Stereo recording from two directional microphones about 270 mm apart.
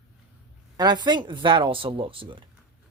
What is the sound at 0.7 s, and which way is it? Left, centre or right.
Speech, centre.